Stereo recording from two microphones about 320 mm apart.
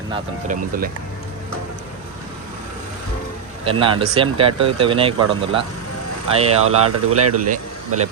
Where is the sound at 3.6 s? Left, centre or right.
Centre.